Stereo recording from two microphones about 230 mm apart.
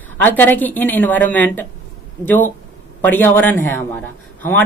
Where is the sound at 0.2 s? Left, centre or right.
Centre.